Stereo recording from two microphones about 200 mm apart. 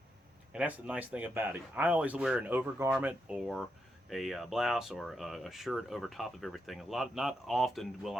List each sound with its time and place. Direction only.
0.5 s speech: 5° right (ahead or behind)